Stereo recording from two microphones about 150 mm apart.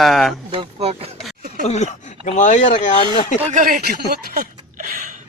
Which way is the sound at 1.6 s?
50° left (ahead or behind).